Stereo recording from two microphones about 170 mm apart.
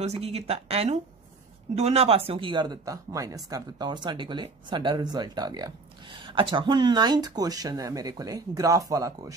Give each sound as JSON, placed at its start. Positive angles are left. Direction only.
{"t": 0.0, "sound": "speech", "side_deg": -40}